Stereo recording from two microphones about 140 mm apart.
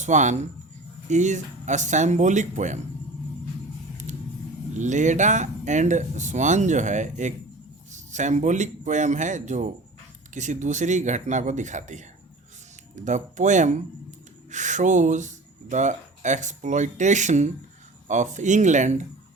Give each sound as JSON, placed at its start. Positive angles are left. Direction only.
{"t": 0.0, "sound": "speech", "side_deg": -60}
{"t": 4.8, "sound": "speech", "side_deg": -60}